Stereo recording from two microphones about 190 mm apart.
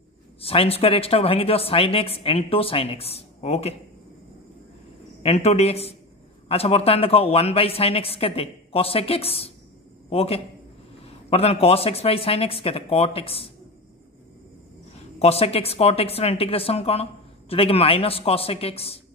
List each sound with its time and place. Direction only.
0.4 s speech: 30° left (ahead or behind)
5.2 s a man's voice: 35° left (ahead or behind)
15.1 s speech: 30° left (ahead or behind)